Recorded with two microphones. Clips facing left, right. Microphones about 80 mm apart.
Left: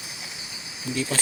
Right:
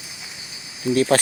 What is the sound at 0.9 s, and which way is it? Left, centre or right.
Speech, right.